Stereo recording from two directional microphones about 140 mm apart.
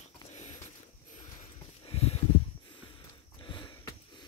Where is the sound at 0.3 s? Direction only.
55° left (ahead or behind).